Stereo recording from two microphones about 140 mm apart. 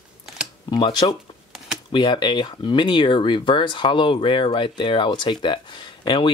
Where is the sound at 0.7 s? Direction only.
30° left (ahead or behind).